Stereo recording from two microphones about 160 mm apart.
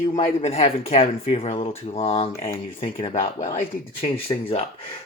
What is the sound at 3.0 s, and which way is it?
Speech, 45° left (ahead or behind).